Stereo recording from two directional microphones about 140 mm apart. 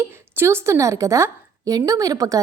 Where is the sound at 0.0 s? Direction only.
20° right (ahead or behind).